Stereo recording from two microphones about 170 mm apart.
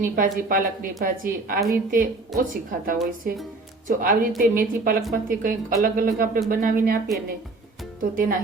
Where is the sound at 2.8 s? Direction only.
55° right (ahead or behind).